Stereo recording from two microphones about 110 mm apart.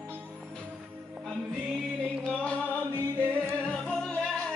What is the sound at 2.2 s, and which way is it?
Chant, 10° left (ahead or behind).